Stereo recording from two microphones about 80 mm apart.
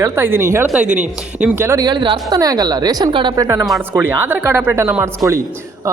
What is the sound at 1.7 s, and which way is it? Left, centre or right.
Speech, right.